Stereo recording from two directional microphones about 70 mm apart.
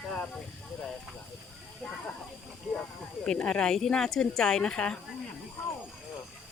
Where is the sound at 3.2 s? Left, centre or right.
Centre.